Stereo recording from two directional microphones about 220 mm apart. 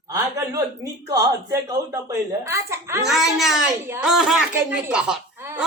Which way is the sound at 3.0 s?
Centre (ahead or behind).